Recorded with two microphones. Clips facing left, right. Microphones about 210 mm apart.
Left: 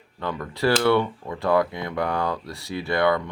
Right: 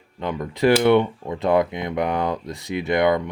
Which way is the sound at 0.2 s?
20° right (ahead or behind).